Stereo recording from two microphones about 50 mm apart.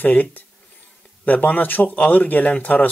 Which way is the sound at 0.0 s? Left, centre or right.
Left.